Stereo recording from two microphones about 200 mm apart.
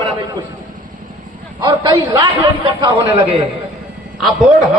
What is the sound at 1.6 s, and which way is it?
A man's voice, 20° right (ahead or behind).